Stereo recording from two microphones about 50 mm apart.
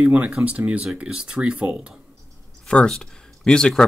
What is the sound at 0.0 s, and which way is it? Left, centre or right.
Speech, right.